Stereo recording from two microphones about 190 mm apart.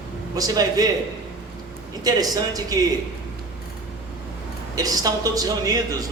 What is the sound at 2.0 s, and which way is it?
Speech, 20° right (ahead or behind).